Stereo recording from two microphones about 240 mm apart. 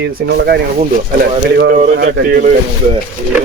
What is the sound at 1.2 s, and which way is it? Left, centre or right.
Speech, right.